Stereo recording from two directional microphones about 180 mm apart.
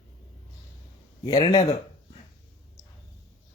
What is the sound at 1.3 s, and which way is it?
Speech, 20° left (ahead or behind).